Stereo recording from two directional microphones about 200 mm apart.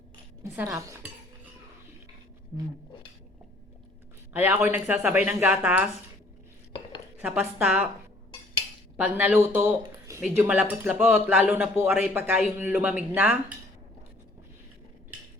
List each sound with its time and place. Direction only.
0.4 s speech: 10° right (ahead or behind)
2.5 s speech: 15° right (ahead or behind)
4.3 s speech: 10° right (ahead or behind)
7.2 s speech: 10° right (ahead or behind)
9.0 s speech: 10° right (ahead or behind)